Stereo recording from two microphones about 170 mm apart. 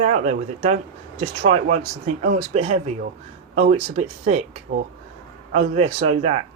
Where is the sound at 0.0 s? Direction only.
45° right (ahead or behind).